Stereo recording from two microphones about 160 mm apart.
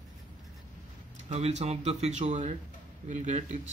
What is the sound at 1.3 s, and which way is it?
Speech, 45° right (ahead or behind).